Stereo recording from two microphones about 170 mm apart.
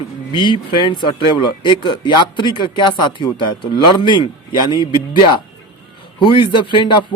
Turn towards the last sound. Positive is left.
turn(degrees=30)  # may be behind; listen again after turning